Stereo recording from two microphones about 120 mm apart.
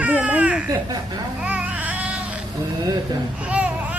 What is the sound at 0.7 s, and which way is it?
Speech, 35° right (ahead or behind).